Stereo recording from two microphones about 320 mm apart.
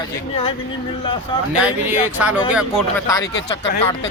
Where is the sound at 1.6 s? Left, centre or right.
Centre.